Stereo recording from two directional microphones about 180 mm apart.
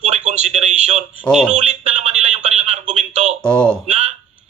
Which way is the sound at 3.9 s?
35° right (ahead or behind).